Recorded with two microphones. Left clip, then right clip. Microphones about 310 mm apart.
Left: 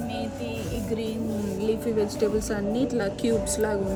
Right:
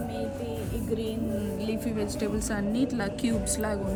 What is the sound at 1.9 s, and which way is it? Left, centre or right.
Speech, right.